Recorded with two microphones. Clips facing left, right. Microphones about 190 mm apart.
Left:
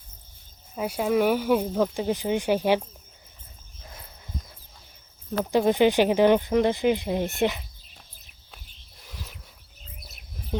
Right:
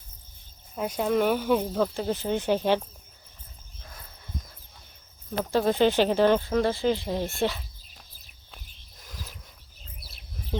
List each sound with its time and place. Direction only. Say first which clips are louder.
0.8 s speech: left 1 dB; 5° left (ahead or behind)
5.5 s speech: left 2 dB; 15° left (ahead or behind)
9.1 s a sound: left 1 dB; centre (ahead or behind)